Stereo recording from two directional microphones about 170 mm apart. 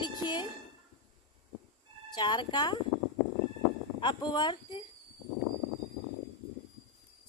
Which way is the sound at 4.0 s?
25° left (ahead or behind).